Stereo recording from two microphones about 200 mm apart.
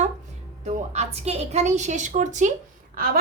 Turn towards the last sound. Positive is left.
turn(degrees=-45)  # may be behind; listen again after turning